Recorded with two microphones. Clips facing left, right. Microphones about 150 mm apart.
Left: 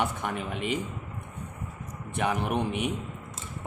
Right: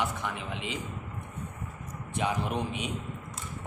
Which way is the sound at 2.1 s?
60° left (ahead or behind).